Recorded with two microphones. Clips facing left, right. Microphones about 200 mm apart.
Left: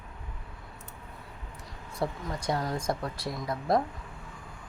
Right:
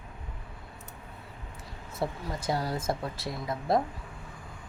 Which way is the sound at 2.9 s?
25° right (ahead or behind).